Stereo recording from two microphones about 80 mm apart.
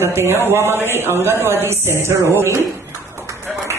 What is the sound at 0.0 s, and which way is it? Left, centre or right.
Speech, right.